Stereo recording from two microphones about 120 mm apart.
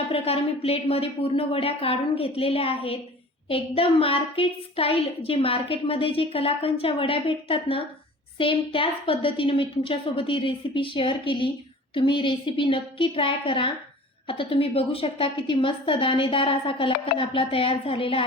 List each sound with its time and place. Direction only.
0.1 s a woman's voice: 55° left (ahead or behind)